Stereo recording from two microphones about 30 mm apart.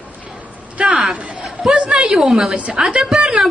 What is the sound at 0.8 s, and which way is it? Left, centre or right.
A woman's voice, right.